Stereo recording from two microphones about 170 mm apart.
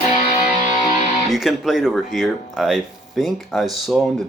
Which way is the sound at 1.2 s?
Centre (ahead or behind).